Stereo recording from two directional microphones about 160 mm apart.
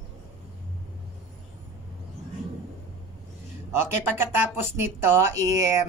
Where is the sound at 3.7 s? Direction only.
15° right (ahead or behind).